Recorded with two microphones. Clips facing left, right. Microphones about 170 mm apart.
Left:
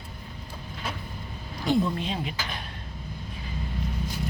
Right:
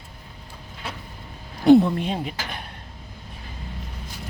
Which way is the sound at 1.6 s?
55° right (ahead or behind).